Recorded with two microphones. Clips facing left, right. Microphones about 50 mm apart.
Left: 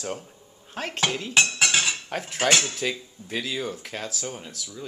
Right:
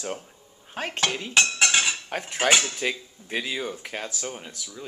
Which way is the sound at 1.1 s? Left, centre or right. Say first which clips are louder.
Left 1 dB; centre.